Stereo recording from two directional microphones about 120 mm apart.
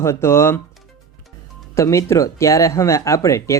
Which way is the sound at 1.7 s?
25° left (ahead or behind).